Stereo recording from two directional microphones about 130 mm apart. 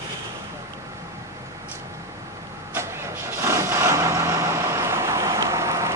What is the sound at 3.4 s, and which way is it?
Vehicle, 20° right (ahead or behind).